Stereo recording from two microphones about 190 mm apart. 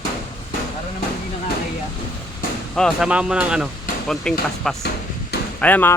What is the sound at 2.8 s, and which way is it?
Speech, centre (ahead or behind).